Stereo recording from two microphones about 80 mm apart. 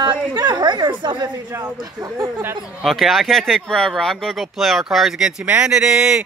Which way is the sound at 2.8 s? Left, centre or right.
Centre.